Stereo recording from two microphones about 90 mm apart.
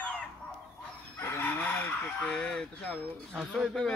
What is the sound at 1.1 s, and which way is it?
Fowl, 30° left (ahead or behind).